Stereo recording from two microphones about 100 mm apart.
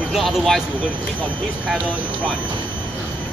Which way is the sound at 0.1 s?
Centre (ahead or behind).